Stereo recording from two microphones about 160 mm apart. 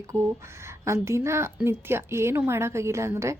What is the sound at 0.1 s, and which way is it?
A woman's voice, 15° right (ahead or behind).